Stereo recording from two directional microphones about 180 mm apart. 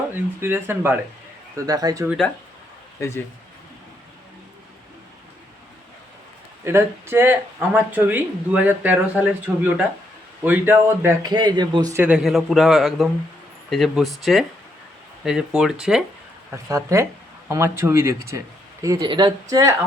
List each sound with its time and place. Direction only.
0.3 s speech: 15° right (ahead or behind)
2.0 s a man's voice: centre (ahead or behind)
3.0 s speech: 15° left (ahead or behind)
6.7 s speech: 15° right (ahead or behind)
11.3 s speech: 25° right (ahead or behind)
12.0 s a man's voice: 5° right (ahead or behind)
16.5 s speech: 15° right (ahead or behind)